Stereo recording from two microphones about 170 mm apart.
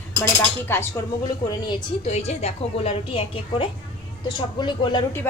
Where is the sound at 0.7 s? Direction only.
15° left (ahead or behind).